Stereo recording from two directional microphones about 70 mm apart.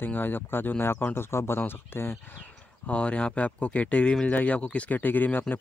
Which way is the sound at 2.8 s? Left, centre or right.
Centre.